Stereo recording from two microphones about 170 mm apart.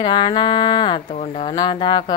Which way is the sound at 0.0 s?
30° left (ahead or behind).